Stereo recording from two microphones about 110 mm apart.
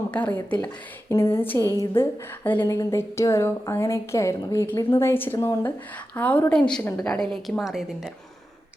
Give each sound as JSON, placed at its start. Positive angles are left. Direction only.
{"t": 0.1, "sound": "a woman's voice", "side_deg": 15}
{"t": 2.6, "sound": "a woman's voice", "side_deg": 25}